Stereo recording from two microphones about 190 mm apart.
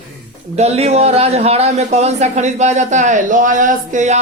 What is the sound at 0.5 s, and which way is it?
Speech, 35° right (ahead or behind).